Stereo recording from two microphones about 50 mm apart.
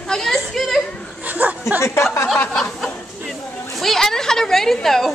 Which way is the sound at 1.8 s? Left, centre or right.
Left.